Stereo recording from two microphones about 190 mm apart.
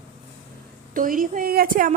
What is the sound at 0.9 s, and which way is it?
Speech, 45° right (ahead or behind).